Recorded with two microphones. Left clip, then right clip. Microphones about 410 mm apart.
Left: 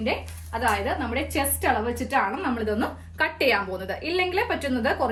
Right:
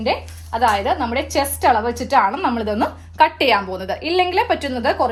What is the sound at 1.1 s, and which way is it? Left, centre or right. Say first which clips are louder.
A woman's voice: right 7 dB; centre.